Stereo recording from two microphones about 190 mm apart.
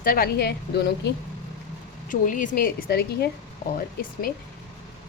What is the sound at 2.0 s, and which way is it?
A woman's voice, 45° left (ahead or behind).